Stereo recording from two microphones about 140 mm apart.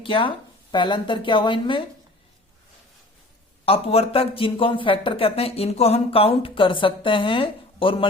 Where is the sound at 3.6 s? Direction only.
45° left (ahead or behind).